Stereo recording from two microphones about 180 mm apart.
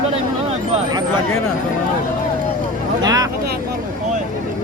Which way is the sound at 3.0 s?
20° right (ahead or behind).